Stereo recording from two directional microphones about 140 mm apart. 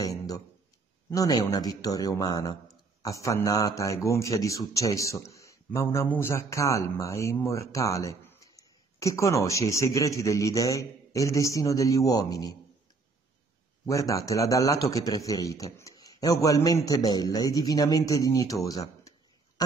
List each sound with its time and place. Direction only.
0.0 s a sound: 25° left (ahead or behind)
1.1 s a man's voice: 25° left (ahead or behind)
13.8 s a man's voice: 25° left (ahead or behind)